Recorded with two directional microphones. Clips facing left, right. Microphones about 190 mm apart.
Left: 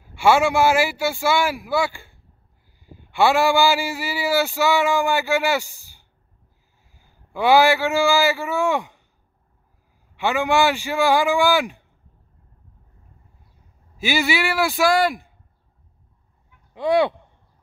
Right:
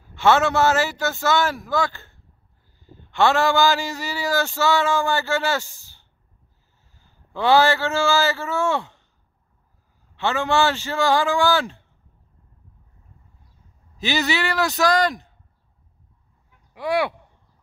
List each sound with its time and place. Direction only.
0.1 s a man's voice: 10° left (ahead or behind)
10.1 s a man's voice: 15° left (ahead or behind)
13.9 s a man's voice: 10° left (ahead or behind)
16.7 s speech: 20° left (ahead or behind)